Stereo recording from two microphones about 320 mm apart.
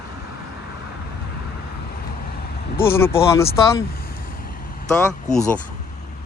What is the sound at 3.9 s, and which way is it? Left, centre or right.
Vehicle, left.